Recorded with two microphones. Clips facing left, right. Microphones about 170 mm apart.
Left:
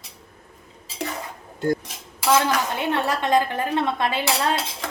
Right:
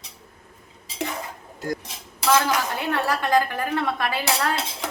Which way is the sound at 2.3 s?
20° left (ahead or behind).